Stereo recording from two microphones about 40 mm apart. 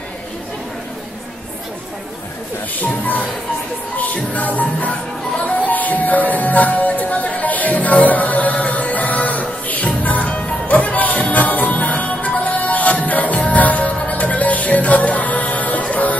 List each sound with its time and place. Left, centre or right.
2.8 s music: left